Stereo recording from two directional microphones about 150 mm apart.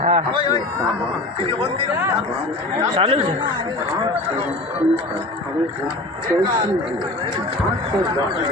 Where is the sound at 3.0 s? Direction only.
40° right (ahead or behind).